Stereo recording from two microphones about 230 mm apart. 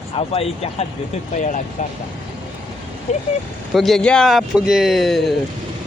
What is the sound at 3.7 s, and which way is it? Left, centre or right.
Speech, centre.